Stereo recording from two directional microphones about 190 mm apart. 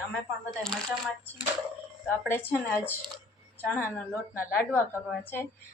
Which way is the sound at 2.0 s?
10° left (ahead or behind).